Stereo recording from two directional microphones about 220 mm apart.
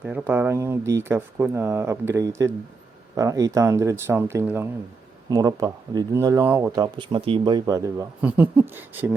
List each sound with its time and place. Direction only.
0.0 s speech: 5° right (ahead or behind)